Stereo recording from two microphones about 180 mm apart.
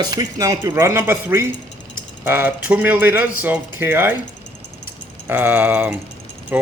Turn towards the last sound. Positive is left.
turn(degrees=-10)  # may be behind; listen again after turning